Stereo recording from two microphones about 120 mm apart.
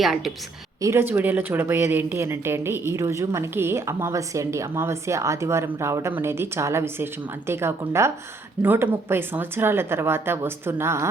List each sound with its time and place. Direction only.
0.0 s a woman's voice: centre (ahead or behind)
0.8 s a woman's voice: 20° right (ahead or behind)